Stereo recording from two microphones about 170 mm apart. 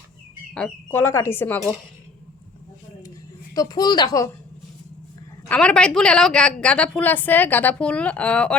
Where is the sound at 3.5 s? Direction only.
20° left (ahead or behind).